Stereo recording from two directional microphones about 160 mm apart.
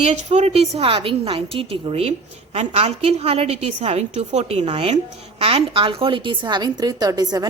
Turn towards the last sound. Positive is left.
turn(degrees=-25)  # may be behind; listen again after turning